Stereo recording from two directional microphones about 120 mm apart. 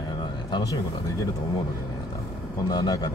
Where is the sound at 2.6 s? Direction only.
35° left (ahead or behind).